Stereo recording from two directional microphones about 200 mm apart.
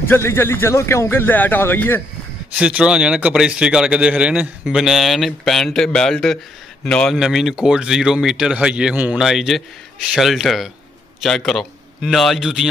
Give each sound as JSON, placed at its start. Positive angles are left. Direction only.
{"t": 0.1, "sound": "speech", "side_deg": 10}
{"t": 2.6, "sound": "a man's voice", "side_deg": -5}